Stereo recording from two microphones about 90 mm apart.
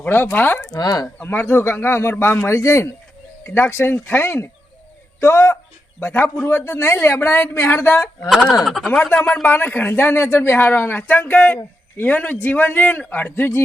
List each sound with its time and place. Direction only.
0.0 s speech: 20° left (ahead or behind)
0.7 s speech: 45° left (ahead or behind)
1.0 s speech: 25° left (ahead or behind)
8.6 s speech: 5° left (ahead or behind)
9.3 s speech: 20° left (ahead or behind)